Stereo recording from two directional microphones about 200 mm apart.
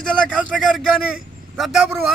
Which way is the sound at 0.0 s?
5° left (ahead or behind).